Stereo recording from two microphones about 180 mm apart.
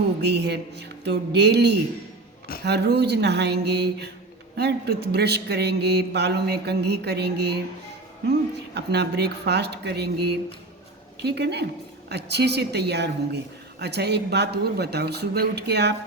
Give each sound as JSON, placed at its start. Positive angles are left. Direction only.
{"t": 0.2, "sound": "a woman's voice", "side_deg": -70}
{"t": 8.7, "sound": "a woman's voice", "side_deg": -65}